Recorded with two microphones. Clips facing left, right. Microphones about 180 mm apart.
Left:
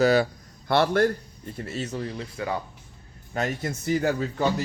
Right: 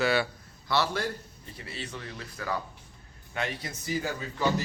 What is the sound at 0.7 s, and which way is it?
A man's voice, 55° left (ahead or behind).